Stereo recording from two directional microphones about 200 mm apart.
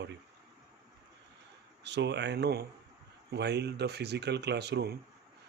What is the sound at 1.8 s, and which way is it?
Speech, 60° right (ahead or behind).